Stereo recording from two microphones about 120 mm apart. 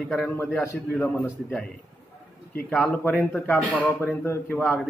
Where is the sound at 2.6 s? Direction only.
15° left (ahead or behind).